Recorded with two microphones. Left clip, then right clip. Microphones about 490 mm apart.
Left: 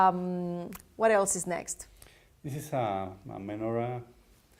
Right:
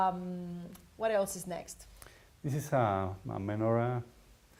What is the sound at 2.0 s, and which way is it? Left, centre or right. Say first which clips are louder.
Speech: right 2 dB; right.